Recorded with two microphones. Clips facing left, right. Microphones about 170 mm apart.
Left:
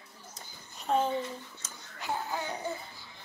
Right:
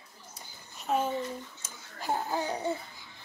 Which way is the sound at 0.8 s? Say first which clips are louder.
Left 1 dB; 5° right (ahead or behind).